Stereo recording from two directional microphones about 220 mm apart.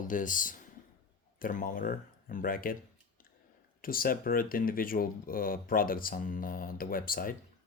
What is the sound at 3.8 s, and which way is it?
Speech, 40° left (ahead or behind).